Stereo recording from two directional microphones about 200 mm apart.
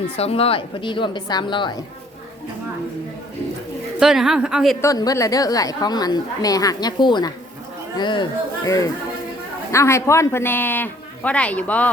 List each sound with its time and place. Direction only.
0.2 s a woman's voice: 30° left (ahead or behind)
4.0 s speech: 5° right (ahead or behind)
4.8 s a woman's voice: 15° left (ahead or behind)